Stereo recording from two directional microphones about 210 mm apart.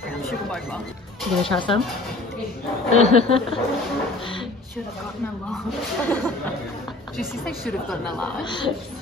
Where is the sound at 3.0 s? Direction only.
30° left (ahead or behind).